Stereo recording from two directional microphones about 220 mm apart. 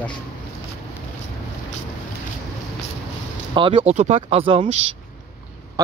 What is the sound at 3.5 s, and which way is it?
Speech, 20° right (ahead or behind).